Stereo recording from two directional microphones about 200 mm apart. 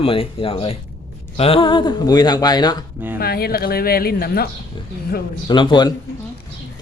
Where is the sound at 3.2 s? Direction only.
50° left (ahead or behind).